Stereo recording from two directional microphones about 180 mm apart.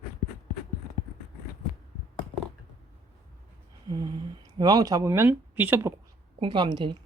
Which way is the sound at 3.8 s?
25° right (ahead or behind).